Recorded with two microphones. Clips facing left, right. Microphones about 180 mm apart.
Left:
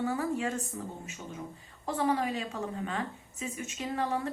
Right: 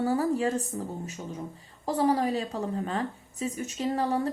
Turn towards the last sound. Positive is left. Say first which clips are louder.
# right 5 dB
turn(degrees=-35)  # may be behind; listen again after turning